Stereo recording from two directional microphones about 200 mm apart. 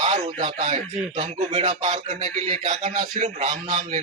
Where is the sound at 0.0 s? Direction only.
35° right (ahead or behind).